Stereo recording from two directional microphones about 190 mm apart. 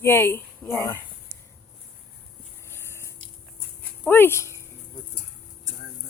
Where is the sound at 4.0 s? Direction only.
10° left (ahead or behind).